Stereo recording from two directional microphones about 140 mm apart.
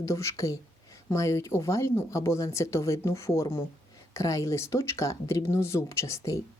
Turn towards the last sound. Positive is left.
turn(degrees=20)  # may be behind; listen again after turning